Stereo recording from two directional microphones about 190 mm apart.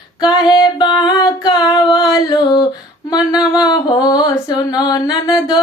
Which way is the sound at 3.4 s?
5° right (ahead or behind).